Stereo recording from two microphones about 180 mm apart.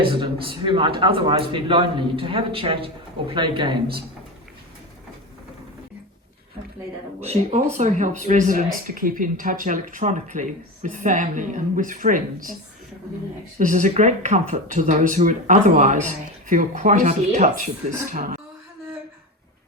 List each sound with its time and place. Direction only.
0.1 s a man's voice: 25° right (ahead or behind)
7.2 s speech: 40° right (ahead or behind)
13.6 s speech: 45° right (ahead or behind)